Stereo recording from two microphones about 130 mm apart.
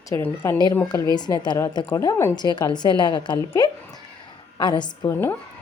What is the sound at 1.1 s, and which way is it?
A woman's voice, 35° left (ahead or behind).